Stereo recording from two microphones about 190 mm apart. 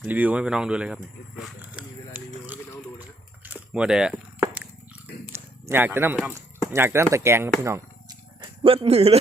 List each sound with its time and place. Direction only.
0.0 s speech: 10° right (ahead or behind)
1.4 s vehicle: 5° right (ahead or behind)
3.4 s biting: 5° right (ahead or behind)
5.3 s speech: 10° right (ahead or behind)
8.4 s speech: 30° right (ahead or behind)